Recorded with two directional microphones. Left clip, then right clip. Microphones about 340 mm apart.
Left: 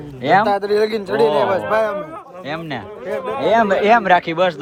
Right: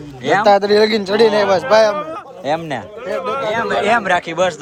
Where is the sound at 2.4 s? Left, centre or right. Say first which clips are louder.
Right 7 dB; centre.